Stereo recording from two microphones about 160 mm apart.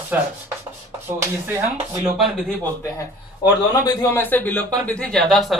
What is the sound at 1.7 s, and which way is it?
Speech, 45° right (ahead or behind).